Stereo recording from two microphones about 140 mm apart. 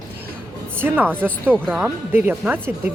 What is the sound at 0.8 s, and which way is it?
A woman's voice, 15° right (ahead or behind).